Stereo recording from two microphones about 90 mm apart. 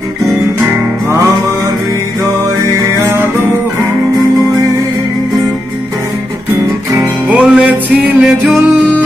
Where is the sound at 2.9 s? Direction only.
30° right (ahead or behind).